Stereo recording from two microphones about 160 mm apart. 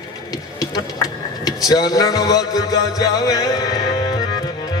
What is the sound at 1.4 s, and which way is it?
Music, 25° left (ahead or behind).